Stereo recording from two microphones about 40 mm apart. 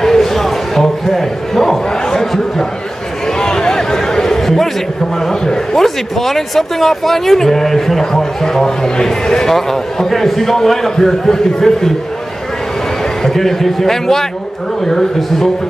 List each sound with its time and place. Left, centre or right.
0.0 s a sound: centre
5.8 s speech: centre
13.2 s speech: centre